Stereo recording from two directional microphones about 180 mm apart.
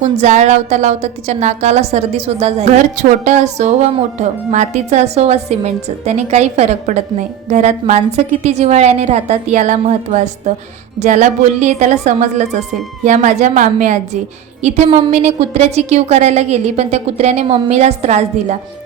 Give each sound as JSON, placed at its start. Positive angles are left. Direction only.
{"t": 0.2, "sound": "a woman's voice", "side_deg": -40}